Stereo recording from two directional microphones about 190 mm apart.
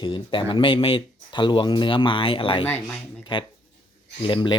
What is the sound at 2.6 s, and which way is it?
Speech, 10° left (ahead or behind).